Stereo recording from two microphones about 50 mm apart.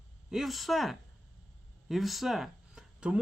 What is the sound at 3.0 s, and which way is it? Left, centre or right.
Speech, right.